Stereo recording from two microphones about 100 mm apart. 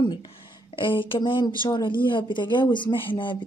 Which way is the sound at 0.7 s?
55° left (ahead or behind).